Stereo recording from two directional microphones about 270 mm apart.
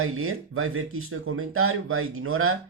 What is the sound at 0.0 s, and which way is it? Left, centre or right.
Speech, right.